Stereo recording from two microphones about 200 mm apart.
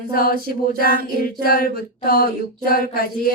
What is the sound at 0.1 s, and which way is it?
Speech, 45° left (ahead or behind).